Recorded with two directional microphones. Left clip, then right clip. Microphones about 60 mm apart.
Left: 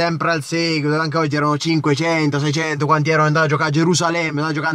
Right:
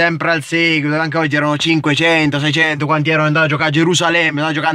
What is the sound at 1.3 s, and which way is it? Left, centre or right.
Speech, centre.